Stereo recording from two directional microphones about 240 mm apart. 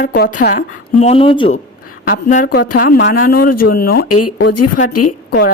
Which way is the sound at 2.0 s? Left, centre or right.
Left.